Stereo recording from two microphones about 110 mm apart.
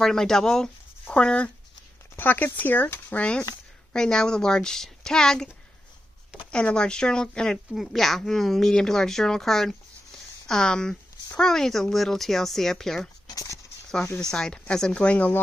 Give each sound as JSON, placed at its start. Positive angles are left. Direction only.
{"t": 0.0, "sound": "a child's voice", "side_deg": 5}
{"t": 6.5, "sound": "a child's voice", "side_deg": 10}
{"t": 13.3, "sound": "a sound", "side_deg": 30}
{"t": 14.1, "sound": "a child's voice", "side_deg": 5}